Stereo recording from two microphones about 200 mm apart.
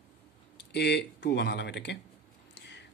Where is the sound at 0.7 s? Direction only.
55° left (ahead or behind).